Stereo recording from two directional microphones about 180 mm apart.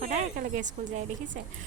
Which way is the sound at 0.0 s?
45° right (ahead or behind).